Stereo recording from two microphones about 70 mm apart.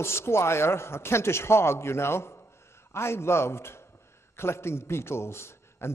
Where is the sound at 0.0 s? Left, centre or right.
Left.